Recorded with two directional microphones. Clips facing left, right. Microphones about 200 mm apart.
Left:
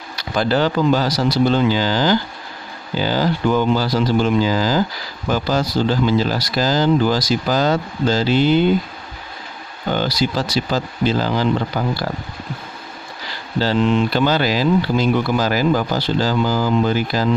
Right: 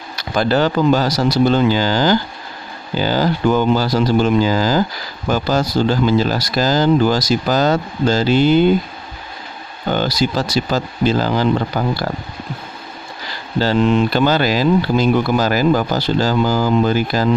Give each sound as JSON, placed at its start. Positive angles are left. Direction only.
{"t": 0.1, "sound": "speech", "side_deg": -45}
{"t": 9.8, "sound": "speech", "side_deg": -45}
{"t": 13.6, "sound": "speech", "side_deg": -45}